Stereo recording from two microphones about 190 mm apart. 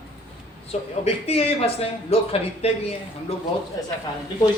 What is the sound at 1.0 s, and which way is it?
A woman's voice, 30° left (ahead or behind).